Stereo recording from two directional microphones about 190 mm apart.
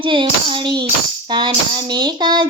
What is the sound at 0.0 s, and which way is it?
Child singing, 25° right (ahead or behind).